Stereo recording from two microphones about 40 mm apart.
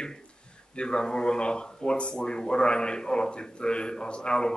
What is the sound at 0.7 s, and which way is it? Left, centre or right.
A man's voice, left.